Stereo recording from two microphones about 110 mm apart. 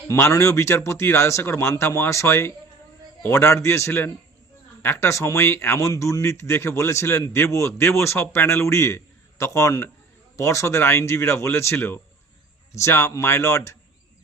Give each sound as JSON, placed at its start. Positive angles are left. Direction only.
{"t": 0.1, "sound": "speech", "side_deg": 25}